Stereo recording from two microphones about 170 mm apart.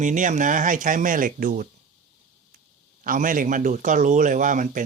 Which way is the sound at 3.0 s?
50° right (ahead or behind).